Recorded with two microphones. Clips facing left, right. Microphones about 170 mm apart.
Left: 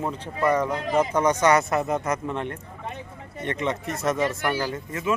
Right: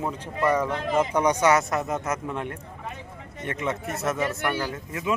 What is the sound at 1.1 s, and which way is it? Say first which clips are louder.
A man's voice: left 1 dB; 10° right (ahead or behind).